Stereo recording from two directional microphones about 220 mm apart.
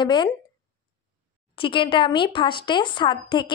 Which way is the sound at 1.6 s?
25° left (ahead or behind).